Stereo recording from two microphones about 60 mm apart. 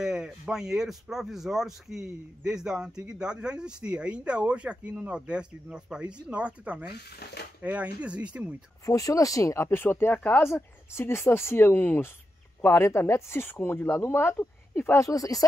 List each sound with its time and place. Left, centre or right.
0.0 s speech: centre
8.8 s speech: left
11.0 s speech: left
12.6 s speech: left
15.0 s speech: left